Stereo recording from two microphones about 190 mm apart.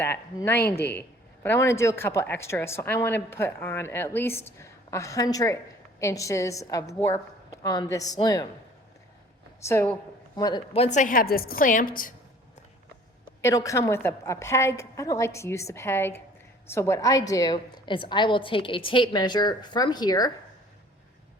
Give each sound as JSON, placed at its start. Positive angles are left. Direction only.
{"t": 0.0, "sound": "a woman's voice", "side_deg": 10}
{"t": 0.6, "sound": "speech", "side_deg": 55}
{"t": 1.5, "sound": "a woman's voice", "side_deg": 15}
{"t": 9.6, "sound": "a woman's voice", "side_deg": 10}
{"t": 10.3, "sound": "a woman's voice", "side_deg": 20}
{"t": 10.8, "sound": "a woman's voice", "side_deg": 40}
{"t": 13.4, "sound": "a woman's voice", "side_deg": 15}